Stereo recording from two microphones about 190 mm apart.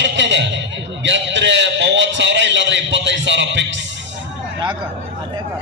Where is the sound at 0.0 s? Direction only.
70° right (ahead or behind).